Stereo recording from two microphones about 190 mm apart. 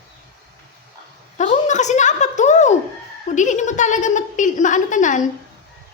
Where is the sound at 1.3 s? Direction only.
40° left (ahead or behind).